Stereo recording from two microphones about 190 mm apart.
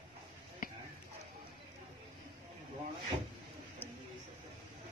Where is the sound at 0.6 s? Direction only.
50° left (ahead or behind).